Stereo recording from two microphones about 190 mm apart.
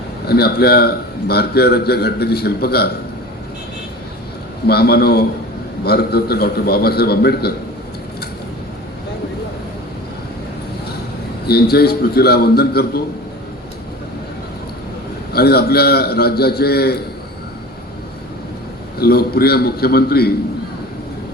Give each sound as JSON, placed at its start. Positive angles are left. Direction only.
{"t": 0.3, "sound": "a man's voice", "side_deg": 55}
{"t": 4.7, "sound": "a man's voice", "side_deg": 55}
{"t": 11.4, "sound": "a man's voice", "side_deg": 55}
{"t": 15.3, "sound": "a man's voice", "side_deg": 55}
{"t": 18.9, "sound": "a man's voice", "side_deg": 55}